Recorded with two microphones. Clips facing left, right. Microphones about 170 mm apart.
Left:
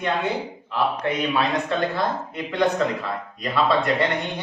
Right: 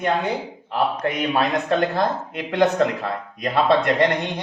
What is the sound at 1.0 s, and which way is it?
A man's voice, 45° right (ahead or behind).